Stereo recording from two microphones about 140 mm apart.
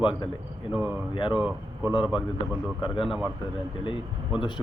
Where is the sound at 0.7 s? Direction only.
15° right (ahead or behind).